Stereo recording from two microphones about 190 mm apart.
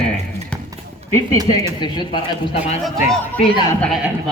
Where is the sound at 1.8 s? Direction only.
25° left (ahead or behind).